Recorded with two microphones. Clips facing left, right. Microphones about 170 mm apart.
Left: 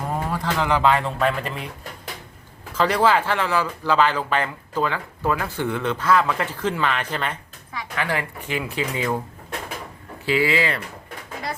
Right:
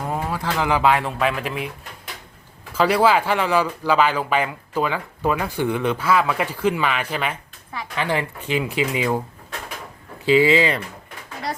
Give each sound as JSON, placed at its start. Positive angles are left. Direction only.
{"t": 0.1, "sound": "speech", "side_deg": -5}
{"t": 2.7, "sound": "speech", "side_deg": -10}
{"t": 7.8, "sound": "speech", "side_deg": -25}
{"t": 10.2, "sound": "speech", "side_deg": -20}